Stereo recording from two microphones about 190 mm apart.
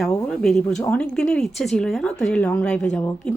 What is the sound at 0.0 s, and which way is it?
Speech, centre (ahead or behind).